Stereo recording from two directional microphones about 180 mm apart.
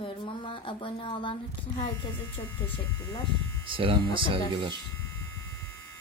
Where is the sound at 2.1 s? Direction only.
10° left (ahead or behind).